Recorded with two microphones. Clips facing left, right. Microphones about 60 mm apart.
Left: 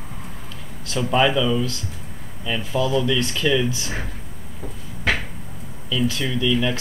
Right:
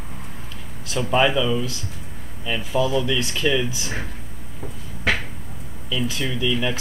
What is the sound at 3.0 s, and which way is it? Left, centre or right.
Speech, centre.